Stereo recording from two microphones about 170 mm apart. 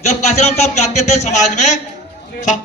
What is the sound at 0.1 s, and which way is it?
A man's voice, 40° left (ahead or behind).